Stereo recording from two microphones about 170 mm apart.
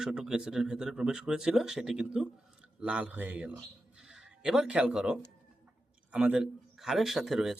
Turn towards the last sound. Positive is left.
turn(degrees=0)  # may be behind; listen again after turning